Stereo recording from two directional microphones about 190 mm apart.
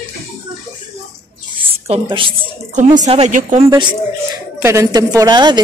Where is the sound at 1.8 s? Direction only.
30° right (ahead or behind).